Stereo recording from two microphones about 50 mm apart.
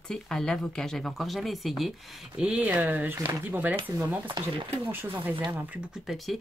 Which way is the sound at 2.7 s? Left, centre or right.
Right.